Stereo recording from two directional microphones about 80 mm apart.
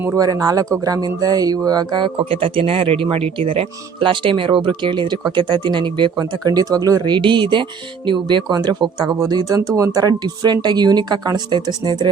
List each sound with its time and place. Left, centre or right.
0.2 s speech: right
1.0 s speech: right
3.0 s speech: right
6.4 s speech: right
7.0 s speech: right